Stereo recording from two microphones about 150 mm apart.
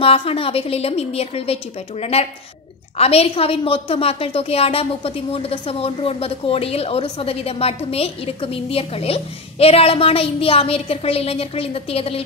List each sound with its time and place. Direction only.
0.0 s a woman's voice: 40° left (ahead or behind)